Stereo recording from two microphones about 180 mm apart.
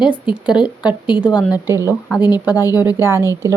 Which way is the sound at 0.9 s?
25° left (ahead or behind).